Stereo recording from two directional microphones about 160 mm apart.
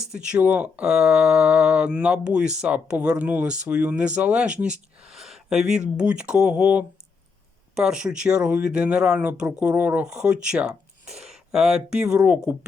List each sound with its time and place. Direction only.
0.1 s speech: 5° right (ahead or behind)
5.1 s a sound: centre (ahead or behind)
6.0 s speech: 5° right (ahead or behind)